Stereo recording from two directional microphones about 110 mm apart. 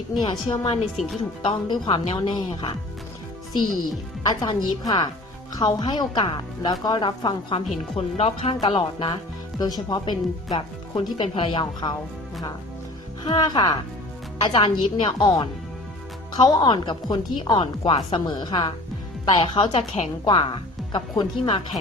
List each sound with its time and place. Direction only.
0.2 s speech: 45° left (ahead or behind)
4.2 s speech: 40° left (ahead or behind)
7.9 s speech: 65° left (ahead or behind)
8.6 s speech: 45° left (ahead or behind)
11.6 s speech: 40° left (ahead or behind)
13.2 s a woman's voice: 45° left (ahead or behind)